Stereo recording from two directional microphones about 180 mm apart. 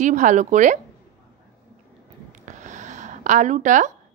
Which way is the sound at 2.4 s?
45° right (ahead or behind).